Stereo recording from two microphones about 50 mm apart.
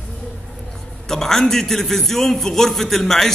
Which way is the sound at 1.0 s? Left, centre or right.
Centre.